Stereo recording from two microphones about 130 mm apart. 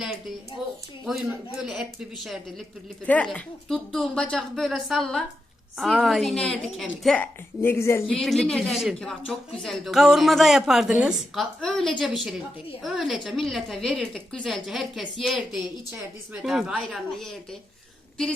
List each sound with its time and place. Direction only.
1.0 s a woman's voice: centre (ahead or behind)
7.6 s a woman's voice: 20° left (ahead or behind)
8.0 s a woman's voice: centre (ahead or behind)